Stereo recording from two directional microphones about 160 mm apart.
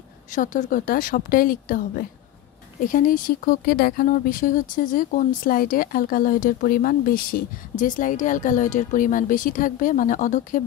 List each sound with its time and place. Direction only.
0.3 s speech: 55° left (ahead or behind)